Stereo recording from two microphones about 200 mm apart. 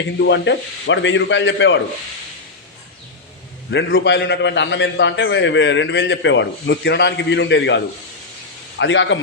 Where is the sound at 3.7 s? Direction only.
55° left (ahead or behind).